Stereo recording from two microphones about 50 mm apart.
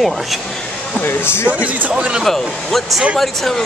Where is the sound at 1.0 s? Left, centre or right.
Left.